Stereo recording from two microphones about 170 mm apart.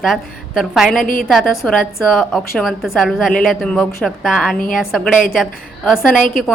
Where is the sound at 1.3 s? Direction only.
Centre (ahead or behind).